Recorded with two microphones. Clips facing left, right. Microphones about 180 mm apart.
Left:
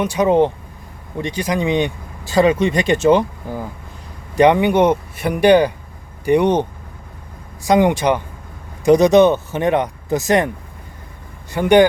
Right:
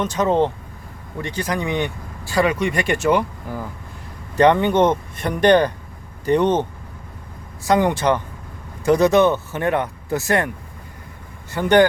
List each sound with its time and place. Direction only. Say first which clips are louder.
0.0 s speech: left 4 dB; 10° left (ahead or behind)
4.4 s speech: left 2 dB; 10° left (ahead or behind)
11.5 s speech: left 3 dB; 15° left (ahead or behind)